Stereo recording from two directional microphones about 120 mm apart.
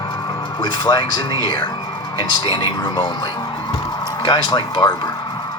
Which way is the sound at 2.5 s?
45° left (ahead or behind).